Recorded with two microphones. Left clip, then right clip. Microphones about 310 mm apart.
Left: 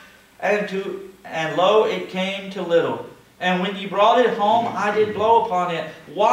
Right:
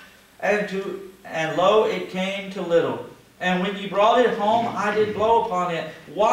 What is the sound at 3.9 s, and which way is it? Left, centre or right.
Speech, centre.